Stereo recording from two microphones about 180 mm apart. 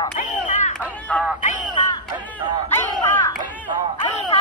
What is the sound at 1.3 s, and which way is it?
Speech, 45° left (ahead or behind).